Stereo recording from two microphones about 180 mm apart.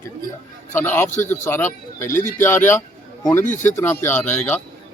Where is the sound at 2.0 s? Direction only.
45° left (ahead or behind).